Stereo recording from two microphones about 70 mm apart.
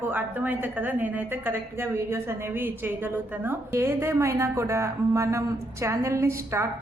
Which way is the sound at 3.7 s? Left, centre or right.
Right.